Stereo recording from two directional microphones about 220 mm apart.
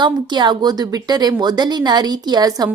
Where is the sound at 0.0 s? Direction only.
20° right (ahead or behind).